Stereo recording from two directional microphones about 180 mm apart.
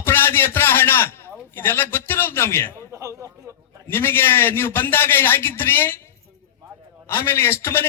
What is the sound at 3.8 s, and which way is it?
A man's voice, 10° left (ahead or behind).